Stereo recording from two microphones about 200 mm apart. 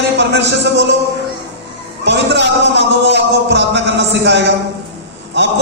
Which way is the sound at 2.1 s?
60° right (ahead or behind).